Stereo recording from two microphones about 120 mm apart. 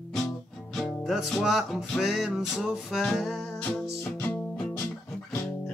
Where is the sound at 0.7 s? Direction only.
Centre (ahead or behind).